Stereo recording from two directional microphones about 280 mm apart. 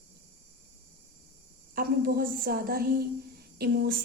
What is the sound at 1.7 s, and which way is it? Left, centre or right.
A woman's voice, right.